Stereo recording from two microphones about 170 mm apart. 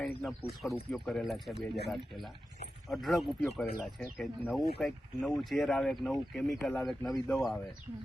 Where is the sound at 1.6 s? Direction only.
70° left (ahead or behind).